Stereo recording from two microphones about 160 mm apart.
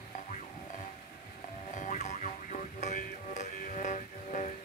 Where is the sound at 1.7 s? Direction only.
50° left (ahead or behind).